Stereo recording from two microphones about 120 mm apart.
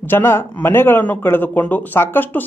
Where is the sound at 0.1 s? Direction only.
20° left (ahead or behind).